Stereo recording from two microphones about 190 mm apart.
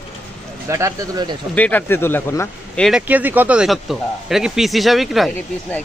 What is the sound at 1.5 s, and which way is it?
Speech, 10° left (ahead or behind).